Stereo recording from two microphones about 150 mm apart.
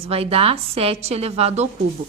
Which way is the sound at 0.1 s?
40° right (ahead or behind).